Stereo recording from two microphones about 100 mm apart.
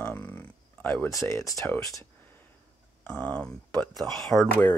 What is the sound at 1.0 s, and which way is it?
Speech, 30° left (ahead or behind).